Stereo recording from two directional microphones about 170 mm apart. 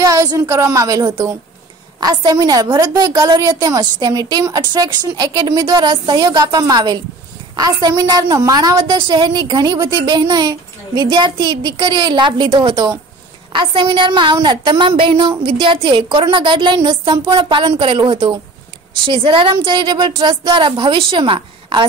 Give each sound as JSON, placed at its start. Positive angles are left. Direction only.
{"t": 0.0, "sound": "a woman's voice", "side_deg": -20}